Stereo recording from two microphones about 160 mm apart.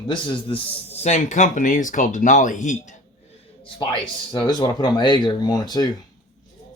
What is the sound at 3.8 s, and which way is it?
Speech, 30° left (ahead or behind).